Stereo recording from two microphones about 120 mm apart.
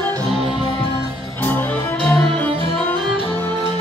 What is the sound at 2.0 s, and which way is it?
Music, 5° left (ahead or behind).